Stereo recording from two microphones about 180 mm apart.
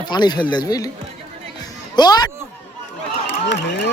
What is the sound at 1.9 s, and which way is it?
Speech, 20° left (ahead or behind).